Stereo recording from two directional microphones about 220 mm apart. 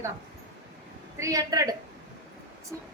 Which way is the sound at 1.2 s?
15° right (ahead or behind).